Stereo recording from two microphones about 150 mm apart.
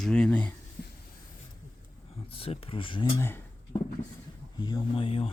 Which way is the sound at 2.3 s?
40° left (ahead or behind).